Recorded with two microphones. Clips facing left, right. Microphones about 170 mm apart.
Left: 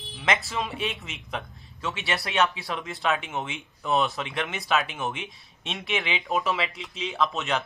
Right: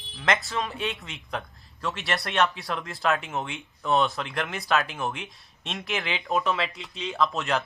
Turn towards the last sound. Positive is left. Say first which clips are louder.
# right 1 dB
turn(degrees=0)  # may be behind; listen again after turning